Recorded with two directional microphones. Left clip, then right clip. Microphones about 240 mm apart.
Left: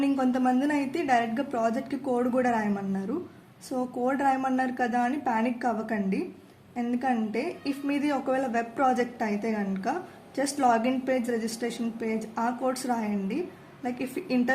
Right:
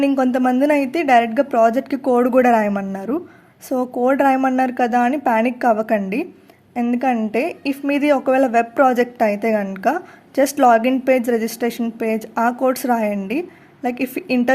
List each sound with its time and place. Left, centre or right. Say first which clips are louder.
0.0 s speech: right 9 dB; right